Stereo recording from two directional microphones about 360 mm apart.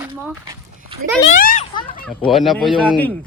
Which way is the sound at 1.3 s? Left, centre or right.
Left.